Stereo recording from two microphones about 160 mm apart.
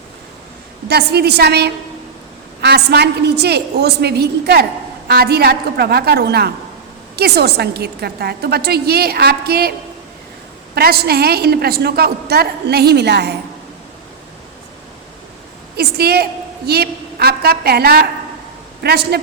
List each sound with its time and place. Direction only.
0.9 s a woman's voice: 90° right
10.8 s a woman's voice: 80° right
15.7 s a sound: 80° right
16.6 s a woman's voice: 90° right
18.8 s a woman's voice: 90° right